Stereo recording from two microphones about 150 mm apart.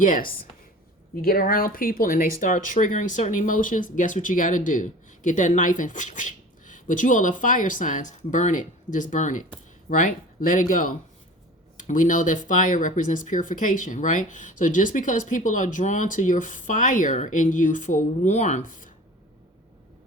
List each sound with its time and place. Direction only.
0.0 s speech: 65° left (ahead or behind)
1.1 s speech: 75° left (ahead or behind)
2.4 s speech: 60° left (ahead or behind)